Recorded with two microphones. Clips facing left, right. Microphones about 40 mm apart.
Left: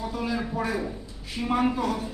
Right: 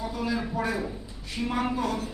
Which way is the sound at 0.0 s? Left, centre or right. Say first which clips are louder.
Even; centre.